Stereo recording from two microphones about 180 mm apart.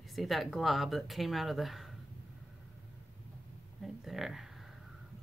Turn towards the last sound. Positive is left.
turn(degrees=0)  # may be behind; listen again after turning